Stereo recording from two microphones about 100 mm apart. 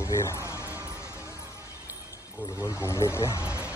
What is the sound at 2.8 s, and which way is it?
Speech, 25° left (ahead or behind).